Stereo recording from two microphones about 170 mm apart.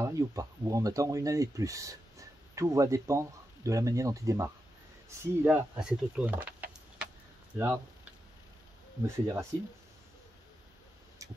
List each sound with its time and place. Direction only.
0.0 s speech: 20° right (ahead or behind)
9.0 s speech: 15° right (ahead or behind)